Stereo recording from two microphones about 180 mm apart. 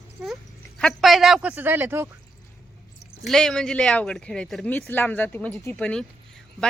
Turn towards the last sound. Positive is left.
turn(degrees=5)  # may be behind; listen again after turning